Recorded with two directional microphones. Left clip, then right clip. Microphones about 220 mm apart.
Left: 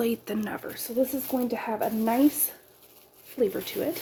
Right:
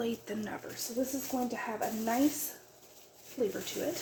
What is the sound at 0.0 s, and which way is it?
A woman's voice, 50° left (ahead or behind).